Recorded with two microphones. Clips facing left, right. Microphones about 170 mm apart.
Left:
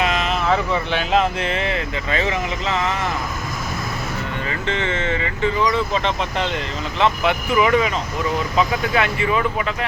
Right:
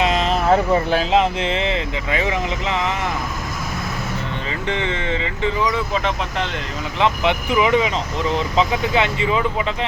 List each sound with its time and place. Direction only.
0.0 s vehicle: 30° right (ahead or behind)
1.1 s speech: 20° right (ahead or behind)
4.4 s speech: 15° right (ahead or behind)
5.9 s speech: 5° right (ahead or behind)
7.0 s speech: 15° right (ahead or behind)